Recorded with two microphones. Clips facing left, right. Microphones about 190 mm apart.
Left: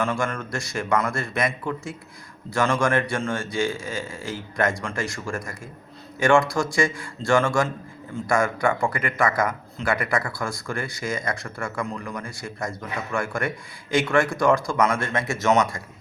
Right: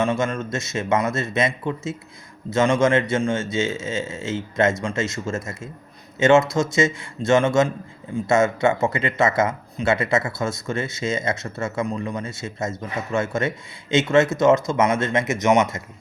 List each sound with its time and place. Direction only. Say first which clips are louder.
0.0 s speech: right 4 dB; 20° right (ahead or behind)